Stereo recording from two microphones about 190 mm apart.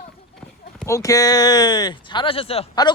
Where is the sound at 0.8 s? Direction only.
15° left (ahead or behind).